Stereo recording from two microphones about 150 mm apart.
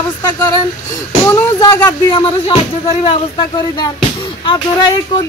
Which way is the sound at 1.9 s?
35° left (ahead or behind).